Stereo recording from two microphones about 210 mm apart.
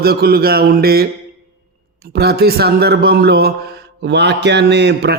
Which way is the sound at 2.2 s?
50° right (ahead or behind).